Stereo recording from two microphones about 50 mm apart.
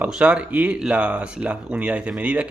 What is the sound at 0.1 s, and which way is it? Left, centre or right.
Speech, right.